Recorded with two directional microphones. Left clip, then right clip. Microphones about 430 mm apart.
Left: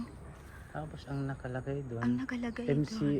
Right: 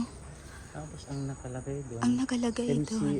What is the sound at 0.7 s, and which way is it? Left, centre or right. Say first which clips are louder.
Speech: left 3 dB; centre.